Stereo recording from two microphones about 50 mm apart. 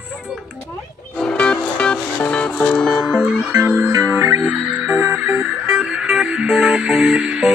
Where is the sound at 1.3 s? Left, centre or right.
Centre.